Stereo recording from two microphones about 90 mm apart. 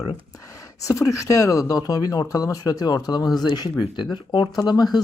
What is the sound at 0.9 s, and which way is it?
Speech, 35° left (ahead or behind).